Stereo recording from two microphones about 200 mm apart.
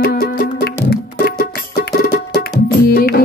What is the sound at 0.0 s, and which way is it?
Music, 50° left (ahead or behind).